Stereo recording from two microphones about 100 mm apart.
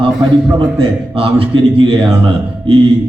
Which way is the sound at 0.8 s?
65° right (ahead or behind).